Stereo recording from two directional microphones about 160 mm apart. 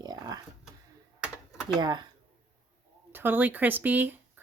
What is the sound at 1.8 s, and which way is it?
Speech, 25° right (ahead or behind).